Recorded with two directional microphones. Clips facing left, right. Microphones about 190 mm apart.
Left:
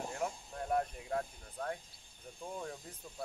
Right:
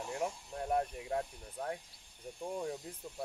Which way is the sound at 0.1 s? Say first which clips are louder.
Right 2 dB; 25° right (ahead or behind).